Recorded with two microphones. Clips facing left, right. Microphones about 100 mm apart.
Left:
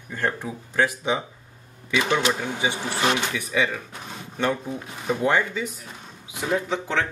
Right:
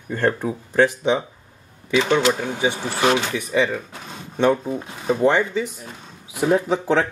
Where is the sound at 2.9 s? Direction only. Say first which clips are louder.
Right 5 dB; 20° right (ahead or behind).